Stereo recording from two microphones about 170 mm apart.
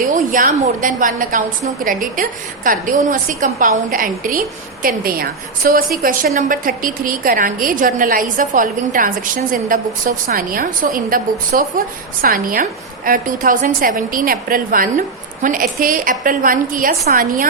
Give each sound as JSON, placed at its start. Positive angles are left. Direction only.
{"t": 0.1, "sound": "a woman's voice", "side_deg": -50}